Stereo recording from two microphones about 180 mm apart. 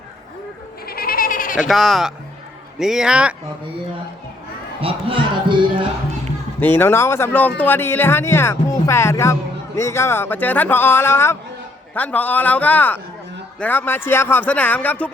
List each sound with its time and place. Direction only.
0.9 s cat: 55° left (ahead or behind)
1.5 s speech: centre (ahead or behind)
4.8 s music: 30° right (ahead or behind)
6.6 s speech: 10° left (ahead or behind)